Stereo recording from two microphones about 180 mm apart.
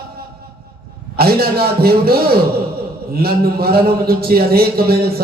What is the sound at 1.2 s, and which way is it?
A man's voice, 60° right (ahead or behind).